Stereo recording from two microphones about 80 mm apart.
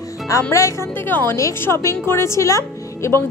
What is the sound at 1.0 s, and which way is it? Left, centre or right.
A woman's voice, left.